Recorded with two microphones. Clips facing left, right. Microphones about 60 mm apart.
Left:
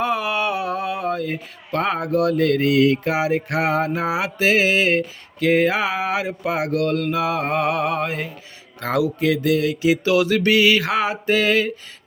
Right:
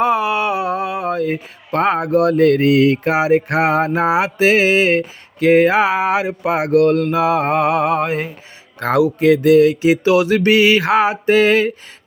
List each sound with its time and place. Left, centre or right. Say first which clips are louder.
0.0 s mantra: right 5 dB; centre
1.7 s speech: right 5 dB; right
8.8 s speech: right 6 dB; right